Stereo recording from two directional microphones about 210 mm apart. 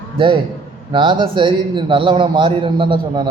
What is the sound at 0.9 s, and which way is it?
A man's voice, 20° right (ahead or behind).